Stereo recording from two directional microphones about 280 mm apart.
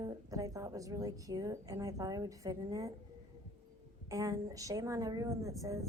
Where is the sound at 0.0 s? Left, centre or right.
Centre.